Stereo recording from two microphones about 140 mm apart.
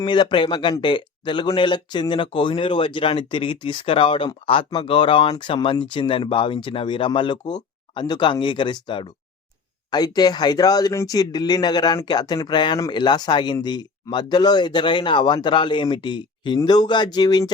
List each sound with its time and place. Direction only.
0.0 s speech: 35° left (ahead or behind)